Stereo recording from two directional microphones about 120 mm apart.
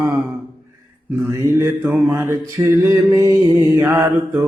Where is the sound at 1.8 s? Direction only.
10° right (ahead or behind).